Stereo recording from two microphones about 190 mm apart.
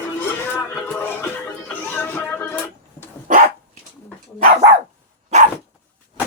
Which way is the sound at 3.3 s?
45° right (ahead or behind).